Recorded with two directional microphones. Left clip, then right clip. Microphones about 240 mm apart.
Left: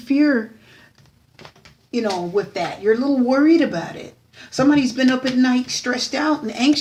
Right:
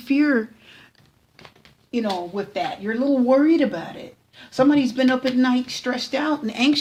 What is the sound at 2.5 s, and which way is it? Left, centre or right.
Speech, right.